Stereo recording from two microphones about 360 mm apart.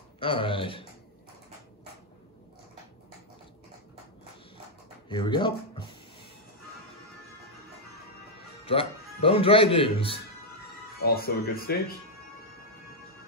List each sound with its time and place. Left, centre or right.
0.2 s speech: centre
5.1 s speech: centre
8.6 s speech: centre